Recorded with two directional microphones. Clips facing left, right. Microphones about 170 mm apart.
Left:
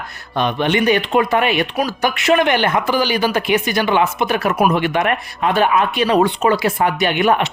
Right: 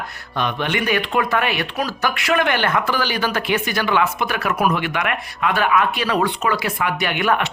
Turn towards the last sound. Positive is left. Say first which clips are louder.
# left 4 dB
turn(degrees=20)  # may be behind; listen again after turning